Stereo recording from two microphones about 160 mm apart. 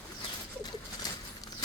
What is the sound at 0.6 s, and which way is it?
Bird, 25° left (ahead or behind).